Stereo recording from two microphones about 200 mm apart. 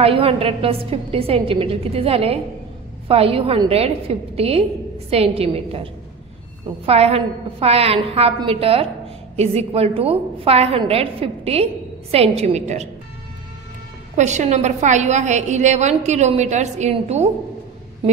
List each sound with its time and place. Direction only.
0.0 s a woman's voice: 30° right (ahead or behind)
6.9 s a woman's voice: 30° right (ahead or behind)
14.1 s a woman's voice: 35° right (ahead or behind)